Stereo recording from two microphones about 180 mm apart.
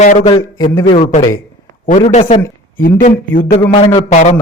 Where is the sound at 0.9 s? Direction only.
35° left (ahead or behind).